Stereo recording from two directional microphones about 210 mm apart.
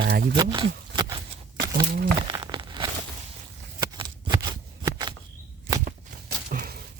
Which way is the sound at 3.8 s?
20° right (ahead or behind).